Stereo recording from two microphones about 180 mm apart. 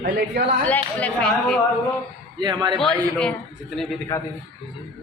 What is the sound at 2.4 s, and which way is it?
Speech, 25° right (ahead or behind).